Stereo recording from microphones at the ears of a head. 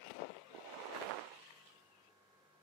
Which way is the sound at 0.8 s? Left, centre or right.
Right.